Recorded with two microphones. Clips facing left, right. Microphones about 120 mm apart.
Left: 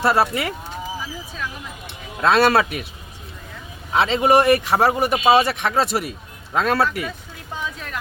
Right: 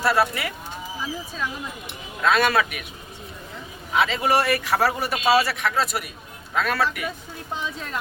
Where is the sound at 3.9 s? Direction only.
25° left (ahead or behind).